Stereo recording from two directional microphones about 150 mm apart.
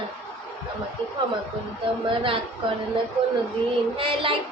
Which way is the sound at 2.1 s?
35° right (ahead or behind).